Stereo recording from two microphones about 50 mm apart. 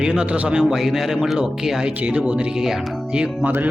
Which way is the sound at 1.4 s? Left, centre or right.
Centre.